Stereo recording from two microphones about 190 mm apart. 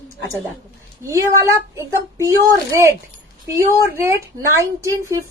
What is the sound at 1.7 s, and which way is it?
Speech, 15° right (ahead or behind).